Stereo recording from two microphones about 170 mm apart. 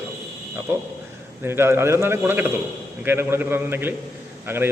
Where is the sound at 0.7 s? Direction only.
15° right (ahead or behind).